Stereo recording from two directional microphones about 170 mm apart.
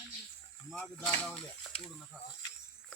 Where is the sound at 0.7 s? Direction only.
5° left (ahead or behind).